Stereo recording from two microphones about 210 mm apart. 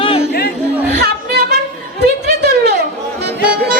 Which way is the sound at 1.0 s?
50° right (ahead or behind).